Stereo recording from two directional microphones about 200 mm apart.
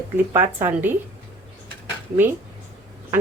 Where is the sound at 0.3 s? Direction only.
10° right (ahead or behind).